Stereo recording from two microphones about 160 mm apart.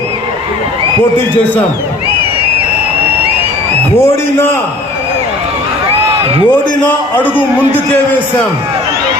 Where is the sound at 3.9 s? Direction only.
15° left (ahead or behind).